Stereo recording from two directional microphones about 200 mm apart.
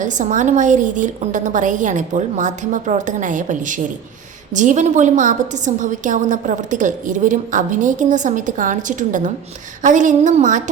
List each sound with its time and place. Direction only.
0.0 s a woman's voice: 40° right (ahead or behind)